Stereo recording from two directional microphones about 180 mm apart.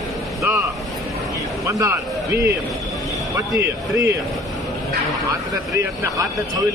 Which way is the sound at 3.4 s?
15° right (ahead or behind).